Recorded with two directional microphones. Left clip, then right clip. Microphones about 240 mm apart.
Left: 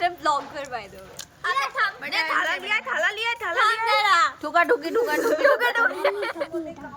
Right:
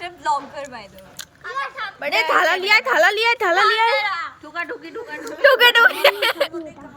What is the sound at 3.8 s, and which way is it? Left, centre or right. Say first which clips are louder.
Speech: left 1 dB; left.